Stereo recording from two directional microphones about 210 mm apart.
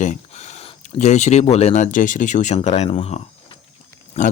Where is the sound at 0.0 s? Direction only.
35° left (ahead or behind).